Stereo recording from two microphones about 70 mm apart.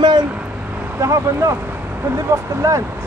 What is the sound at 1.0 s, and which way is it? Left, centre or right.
Speech, right.